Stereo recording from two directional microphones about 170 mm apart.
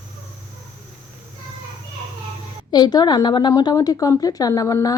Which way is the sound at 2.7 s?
25° left (ahead or behind).